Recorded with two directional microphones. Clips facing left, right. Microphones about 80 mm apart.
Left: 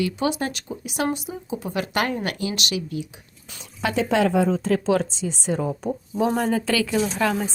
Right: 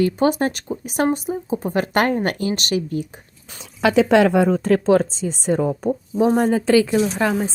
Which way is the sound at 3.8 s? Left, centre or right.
Right.